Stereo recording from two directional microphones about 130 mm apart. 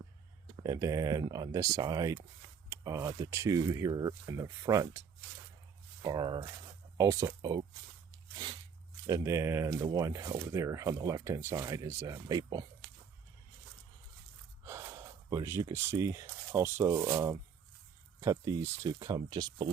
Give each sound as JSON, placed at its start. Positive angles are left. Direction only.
{"t": 0.6, "sound": "speech", "side_deg": -25}
{"t": 9.0, "sound": "speech", "side_deg": -25}
{"t": 14.6, "sound": "speech", "side_deg": -20}